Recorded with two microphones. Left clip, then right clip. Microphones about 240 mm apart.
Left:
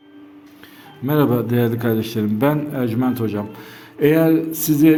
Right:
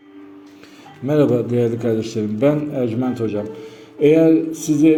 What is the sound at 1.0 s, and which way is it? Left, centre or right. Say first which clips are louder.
A man's voice: right 2 dB; left.